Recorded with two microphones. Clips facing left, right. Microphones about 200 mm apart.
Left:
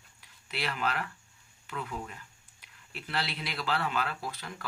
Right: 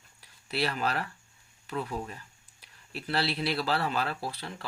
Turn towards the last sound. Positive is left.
turn(degrees=-30)  # may be behind; listen again after turning